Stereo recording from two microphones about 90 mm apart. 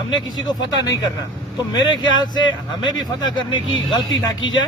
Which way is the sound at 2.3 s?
55° left (ahead or behind).